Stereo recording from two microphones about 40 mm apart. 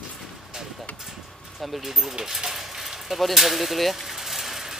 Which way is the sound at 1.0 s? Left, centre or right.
Centre.